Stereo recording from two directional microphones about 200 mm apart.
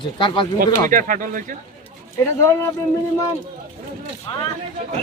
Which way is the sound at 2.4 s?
15° left (ahead or behind).